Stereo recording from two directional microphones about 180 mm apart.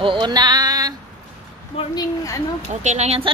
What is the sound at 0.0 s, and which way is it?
Female singing, 25° right (ahead or behind).